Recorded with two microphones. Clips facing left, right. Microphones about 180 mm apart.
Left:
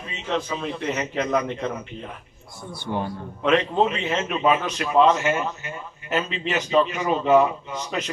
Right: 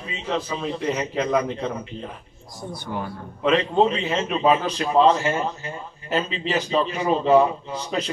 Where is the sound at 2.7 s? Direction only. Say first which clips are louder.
Left 2 dB; 25° left (ahead or behind).